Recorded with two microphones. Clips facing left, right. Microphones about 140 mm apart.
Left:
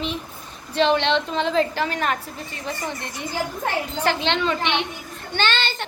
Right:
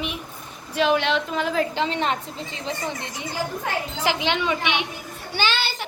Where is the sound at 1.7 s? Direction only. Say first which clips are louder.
Even; 20° right (ahead or behind).